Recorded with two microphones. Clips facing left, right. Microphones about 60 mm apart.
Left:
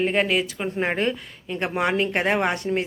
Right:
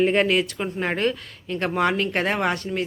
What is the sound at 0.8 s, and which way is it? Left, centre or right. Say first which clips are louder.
Speech: even; centre.